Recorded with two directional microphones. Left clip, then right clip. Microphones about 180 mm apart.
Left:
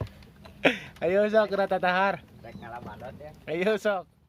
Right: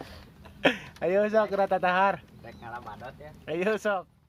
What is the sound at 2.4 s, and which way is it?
Speech, 5° left (ahead or behind).